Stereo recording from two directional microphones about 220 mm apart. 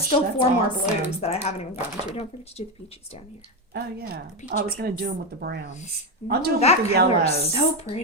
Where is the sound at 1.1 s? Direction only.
25° left (ahead or behind).